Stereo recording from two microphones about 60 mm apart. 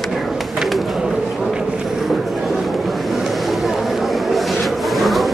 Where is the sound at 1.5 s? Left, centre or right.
Centre.